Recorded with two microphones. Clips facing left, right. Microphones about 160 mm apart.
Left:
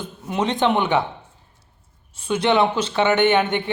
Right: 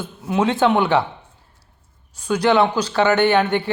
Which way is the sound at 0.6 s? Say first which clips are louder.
Right 2 dB; 20° left (ahead or behind).